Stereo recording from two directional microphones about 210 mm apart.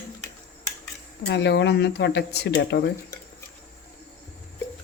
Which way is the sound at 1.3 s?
55° left (ahead or behind).